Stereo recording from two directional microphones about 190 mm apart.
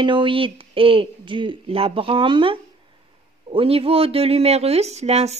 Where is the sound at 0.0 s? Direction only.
25° right (ahead or behind).